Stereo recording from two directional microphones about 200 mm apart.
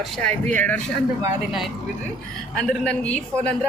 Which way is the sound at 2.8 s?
5° left (ahead or behind).